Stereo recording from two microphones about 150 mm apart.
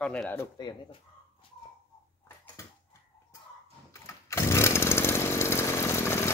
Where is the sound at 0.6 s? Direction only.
30° left (ahead or behind).